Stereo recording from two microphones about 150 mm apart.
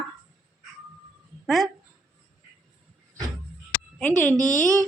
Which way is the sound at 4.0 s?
10° left (ahead or behind).